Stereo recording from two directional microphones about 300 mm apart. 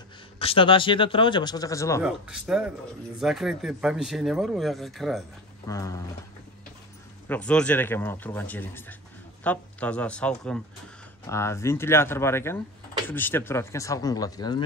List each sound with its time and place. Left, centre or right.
0.4 s speech: centre
2.0 s speech: centre
5.7 s speech: centre
7.2 s speech: centre